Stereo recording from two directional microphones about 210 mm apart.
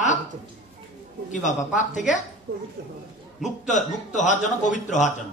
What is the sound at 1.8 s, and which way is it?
Speech, 35° left (ahead or behind).